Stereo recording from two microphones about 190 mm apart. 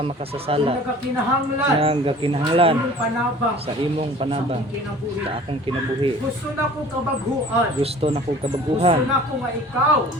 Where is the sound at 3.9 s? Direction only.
30° right (ahead or behind).